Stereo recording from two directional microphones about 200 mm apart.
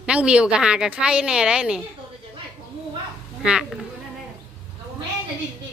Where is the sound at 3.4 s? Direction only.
5° right (ahead or behind).